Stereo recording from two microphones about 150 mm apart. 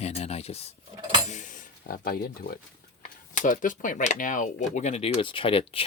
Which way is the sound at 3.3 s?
60° left (ahead or behind).